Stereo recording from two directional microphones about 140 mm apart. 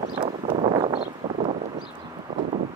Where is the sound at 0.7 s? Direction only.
40° right (ahead or behind).